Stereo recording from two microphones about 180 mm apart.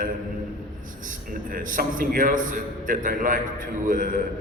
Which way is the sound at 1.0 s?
50° right (ahead or behind).